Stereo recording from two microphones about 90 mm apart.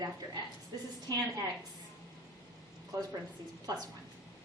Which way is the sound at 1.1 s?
50° right (ahead or behind).